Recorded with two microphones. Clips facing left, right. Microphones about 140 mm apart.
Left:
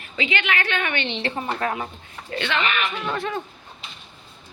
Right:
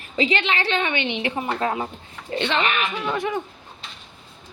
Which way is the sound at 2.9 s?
15° right (ahead or behind).